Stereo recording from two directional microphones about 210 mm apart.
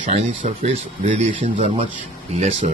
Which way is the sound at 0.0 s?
35° right (ahead or behind).